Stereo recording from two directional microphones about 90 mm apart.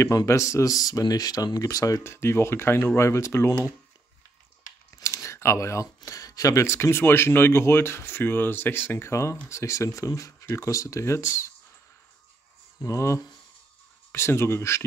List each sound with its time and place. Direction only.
0.0 s speech: 35° left (ahead or behind)
2.0 s speech: 30° left (ahead or behind)
4.9 s speech: 35° left (ahead or behind)
12.8 s speech: 30° left (ahead or behind)